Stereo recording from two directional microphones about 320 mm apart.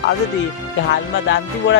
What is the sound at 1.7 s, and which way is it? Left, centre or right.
Speech, left.